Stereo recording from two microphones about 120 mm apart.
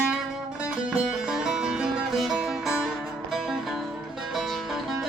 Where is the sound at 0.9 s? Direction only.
5° right (ahead or behind).